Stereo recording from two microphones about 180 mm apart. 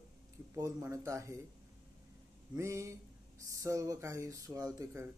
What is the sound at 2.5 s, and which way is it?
Speech, 15° right (ahead or behind).